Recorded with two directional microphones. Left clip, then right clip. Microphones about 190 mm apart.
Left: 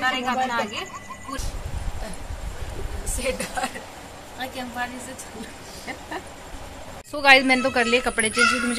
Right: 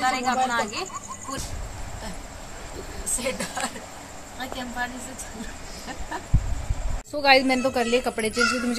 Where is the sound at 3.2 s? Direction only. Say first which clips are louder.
Left 3 dB; 10° left (ahead or behind).